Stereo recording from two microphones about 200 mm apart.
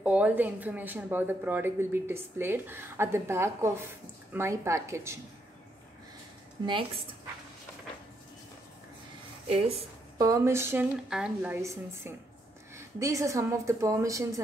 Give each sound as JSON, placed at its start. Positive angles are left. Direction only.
{"t": 0.0, "sound": "speech", "side_deg": -5}
{"t": 6.6, "sound": "a woman's voice", "side_deg": -20}
{"t": 10.1, "sound": "speech", "side_deg": -15}
{"t": 11.6, "sound": "speech", "side_deg": -15}